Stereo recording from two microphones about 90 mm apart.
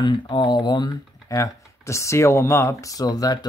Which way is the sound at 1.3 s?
35° left (ahead or behind).